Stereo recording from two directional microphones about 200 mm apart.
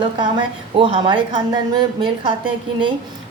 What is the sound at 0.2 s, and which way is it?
A woman's voice, 25° right (ahead or behind).